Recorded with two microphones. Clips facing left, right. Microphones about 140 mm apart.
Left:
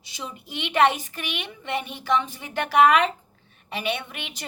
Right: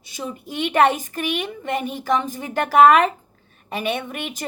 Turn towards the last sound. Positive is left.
turn(degrees=-45)  # may be behind; listen again after turning